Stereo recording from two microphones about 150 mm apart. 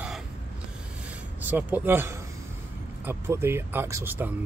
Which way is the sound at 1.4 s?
10° right (ahead or behind).